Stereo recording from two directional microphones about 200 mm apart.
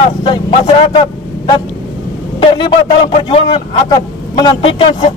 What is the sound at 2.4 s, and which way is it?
Speech, 25° left (ahead or behind).